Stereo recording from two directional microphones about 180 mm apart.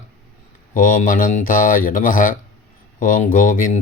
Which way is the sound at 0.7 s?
45° left (ahead or behind).